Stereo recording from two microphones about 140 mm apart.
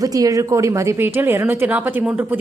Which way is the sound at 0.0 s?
25° right (ahead or behind).